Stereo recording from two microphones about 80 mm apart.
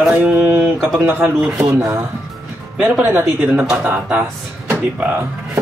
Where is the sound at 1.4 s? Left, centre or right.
Centre.